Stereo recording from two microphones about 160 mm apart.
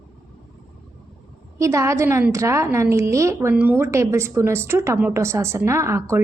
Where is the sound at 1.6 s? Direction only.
20° right (ahead or behind).